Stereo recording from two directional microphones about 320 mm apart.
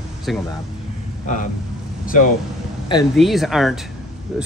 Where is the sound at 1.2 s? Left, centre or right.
Left.